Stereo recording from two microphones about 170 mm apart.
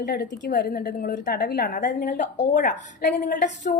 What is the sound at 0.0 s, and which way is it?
A woman's voice, 65° left (ahead or behind).